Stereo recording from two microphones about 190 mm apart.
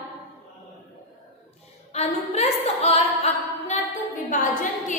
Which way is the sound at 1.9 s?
35° left (ahead or behind).